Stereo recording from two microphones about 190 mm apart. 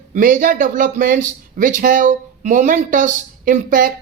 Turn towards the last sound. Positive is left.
turn(degrees=-45)  # may be behind; listen again after turning